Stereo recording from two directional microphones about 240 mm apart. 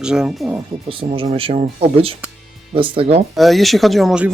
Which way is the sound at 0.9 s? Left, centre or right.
Right.